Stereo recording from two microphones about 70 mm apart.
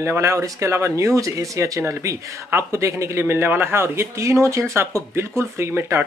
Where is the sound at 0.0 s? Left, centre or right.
Right.